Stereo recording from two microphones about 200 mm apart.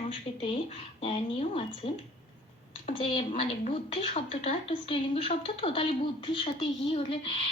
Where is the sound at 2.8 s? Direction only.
30° left (ahead or behind).